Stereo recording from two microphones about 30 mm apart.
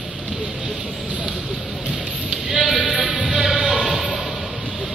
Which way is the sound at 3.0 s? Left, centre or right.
Right.